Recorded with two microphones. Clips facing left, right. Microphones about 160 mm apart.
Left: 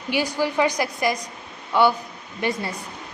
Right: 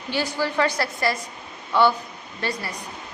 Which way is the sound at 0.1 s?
15° left (ahead or behind).